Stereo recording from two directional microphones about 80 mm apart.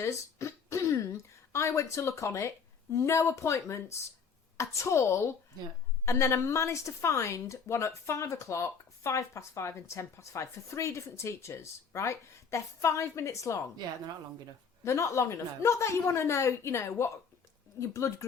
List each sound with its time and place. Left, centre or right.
0.0 s throat clearing: left
2.9 s a woman's voice: left
14.8 s a woman's voice: left